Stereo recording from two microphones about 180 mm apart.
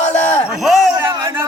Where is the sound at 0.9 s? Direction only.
15° right (ahead or behind).